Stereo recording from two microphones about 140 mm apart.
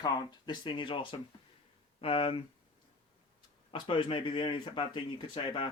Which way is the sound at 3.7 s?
40° left (ahead or behind).